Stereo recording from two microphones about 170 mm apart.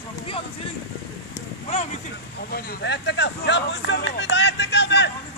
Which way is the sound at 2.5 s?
65° left (ahead or behind).